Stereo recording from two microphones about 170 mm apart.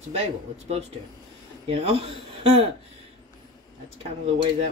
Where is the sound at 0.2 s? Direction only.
40° right (ahead or behind).